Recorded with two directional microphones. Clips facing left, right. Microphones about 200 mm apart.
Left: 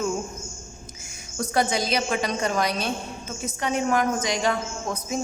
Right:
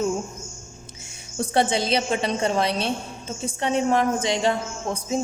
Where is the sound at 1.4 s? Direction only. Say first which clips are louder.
Right 2 dB; 30° right (ahead or behind).